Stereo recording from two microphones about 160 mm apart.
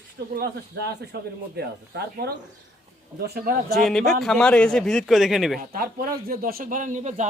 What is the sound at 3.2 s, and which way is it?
Speech, 70° right (ahead or behind).